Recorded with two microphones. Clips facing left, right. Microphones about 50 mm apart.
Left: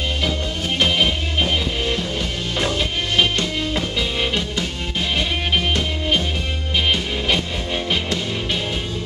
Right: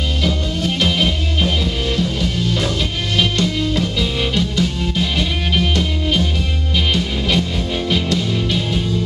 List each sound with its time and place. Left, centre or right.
0.2 s music: centre